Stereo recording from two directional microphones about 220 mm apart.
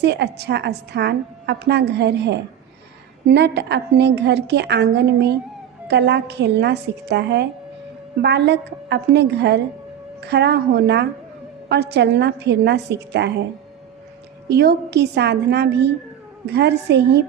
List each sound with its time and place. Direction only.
0.0 s a woman's voice: 50° right (ahead or behind)
14.5 s a woman's voice: 45° right (ahead or behind)